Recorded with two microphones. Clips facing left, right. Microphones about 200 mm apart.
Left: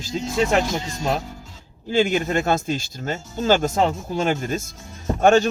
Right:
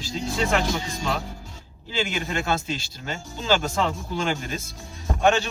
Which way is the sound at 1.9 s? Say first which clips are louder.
Left 8 dB; 50° left (ahead or behind).